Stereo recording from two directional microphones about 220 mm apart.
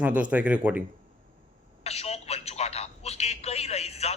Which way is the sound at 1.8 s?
30° left (ahead or behind).